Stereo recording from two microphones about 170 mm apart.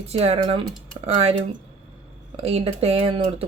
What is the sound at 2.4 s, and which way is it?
Speech, 40° right (ahead or behind).